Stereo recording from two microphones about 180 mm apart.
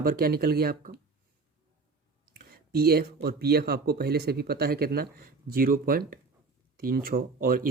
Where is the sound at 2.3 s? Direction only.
60° right (ahead or behind).